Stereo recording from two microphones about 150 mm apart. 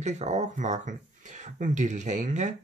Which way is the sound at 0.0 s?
50° right (ahead or behind).